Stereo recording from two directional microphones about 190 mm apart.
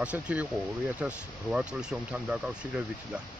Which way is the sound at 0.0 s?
5° right (ahead or behind).